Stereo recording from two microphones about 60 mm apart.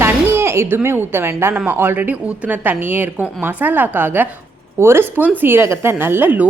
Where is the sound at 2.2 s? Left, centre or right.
Right.